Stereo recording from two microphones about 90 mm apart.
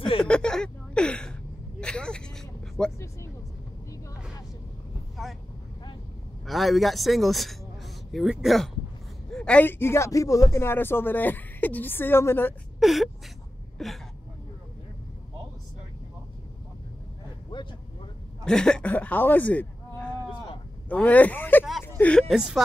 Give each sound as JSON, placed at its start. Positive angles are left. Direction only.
{"t": 0.2, "sound": "a sound", "side_deg": 10}
{"t": 5.2, "sound": "vehicle", "side_deg": 0}
{"t": 6.4, "sound": "a man's voice", "side_deg": 0}
{"t": 9.3, "sound": "a sound", "side_deg": 10}
{"t": 9.7, "sound": "speech", "side_deg": 25}
{"t": 12.8, "sound": "a man's voice", "side_deg": 0}
{"t": 18.4, "sound": "speech", "side_deg": 10}
{"t": 20.9, "sound": "speech", "side_deg": 15}
{"t": 21.8, "sound": "a sound", "side_deg": 20}